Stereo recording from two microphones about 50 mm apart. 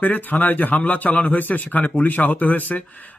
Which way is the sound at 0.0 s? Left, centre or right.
Left.